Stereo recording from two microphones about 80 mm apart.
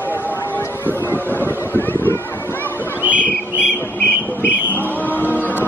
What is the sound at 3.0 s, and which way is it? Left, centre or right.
Bird, right.